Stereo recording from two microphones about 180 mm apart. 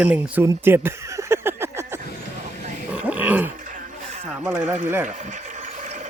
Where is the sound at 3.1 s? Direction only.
10° right (ahead or behind).